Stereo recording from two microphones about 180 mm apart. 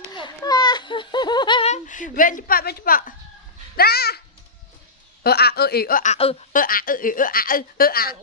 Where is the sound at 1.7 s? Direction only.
45° left (ahead or behind).